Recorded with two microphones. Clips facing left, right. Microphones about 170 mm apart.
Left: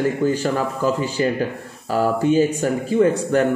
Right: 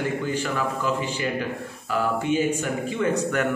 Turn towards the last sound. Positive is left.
turn(degrees=30)  # may be behind; listen again after turning